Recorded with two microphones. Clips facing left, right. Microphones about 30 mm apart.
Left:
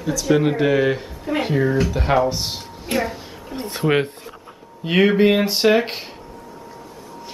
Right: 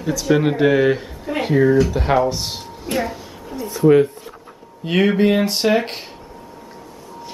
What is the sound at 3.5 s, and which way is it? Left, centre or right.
Speech, left.